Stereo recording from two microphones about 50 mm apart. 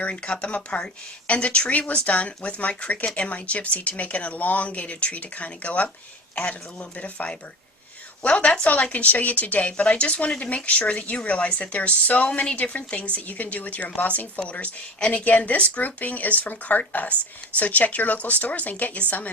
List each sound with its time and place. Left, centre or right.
0.0 s speech: left